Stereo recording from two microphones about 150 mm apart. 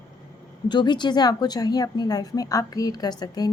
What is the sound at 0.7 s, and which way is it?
A woman's voice, 30° left (ahead or behind).